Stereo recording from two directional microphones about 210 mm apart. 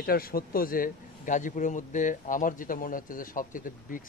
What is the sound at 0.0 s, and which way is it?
A man's voice, 45° left (ahead or behind).